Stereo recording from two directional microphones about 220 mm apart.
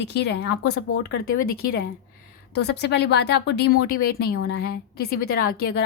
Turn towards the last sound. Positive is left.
turn(degrees=45)  # may be behind; listen again after turning